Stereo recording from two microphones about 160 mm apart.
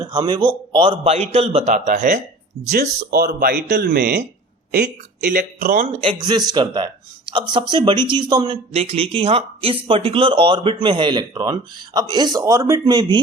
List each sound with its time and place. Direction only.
0.0 s speech: 30° right (ahead or behind); by 2.1 s 60° right (ahead or behind)
3.1 s speech: 70° right (ahead or behind)
6.0 s speech: 30° right (ahead or behind)